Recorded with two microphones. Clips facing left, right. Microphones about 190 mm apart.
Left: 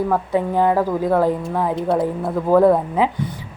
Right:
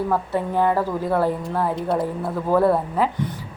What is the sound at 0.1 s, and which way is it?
A woman's voice, 15° left (ahead or behind).